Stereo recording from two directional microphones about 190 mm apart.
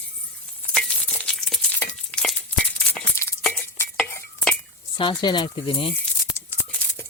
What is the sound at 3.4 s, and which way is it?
Chink, 10° left (ahead or behind).